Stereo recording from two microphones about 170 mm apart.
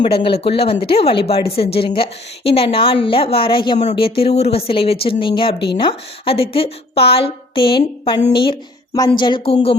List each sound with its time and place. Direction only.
0.0 s a woman's voice: 30° left (ahead or behind)